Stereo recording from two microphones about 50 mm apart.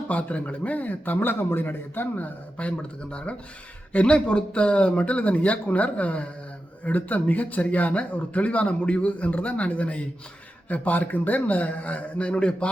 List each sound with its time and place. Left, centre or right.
0.1 s a man's voice: left
2.6 s a man's voice: left